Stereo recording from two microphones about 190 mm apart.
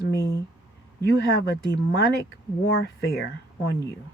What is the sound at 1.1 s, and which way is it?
Speech, 65° left (ahead or behind).